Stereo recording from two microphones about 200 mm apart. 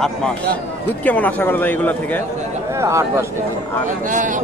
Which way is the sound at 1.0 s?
10° left (ahead or behind).